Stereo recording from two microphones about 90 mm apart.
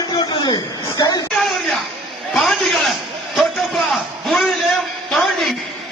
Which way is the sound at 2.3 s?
Centre (ahead or behind).